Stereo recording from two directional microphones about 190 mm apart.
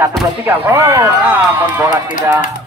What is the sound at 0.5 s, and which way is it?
Speech, 15° right (ahead or behind).